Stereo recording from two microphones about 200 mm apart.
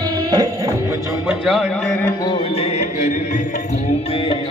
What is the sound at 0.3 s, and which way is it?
Music, 20° right (ahead or behind).